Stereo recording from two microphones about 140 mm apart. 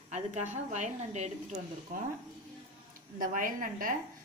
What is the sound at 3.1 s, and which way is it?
Speech, 80° right.